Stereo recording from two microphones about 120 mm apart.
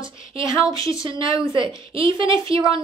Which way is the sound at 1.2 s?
45° right (ahead or behind).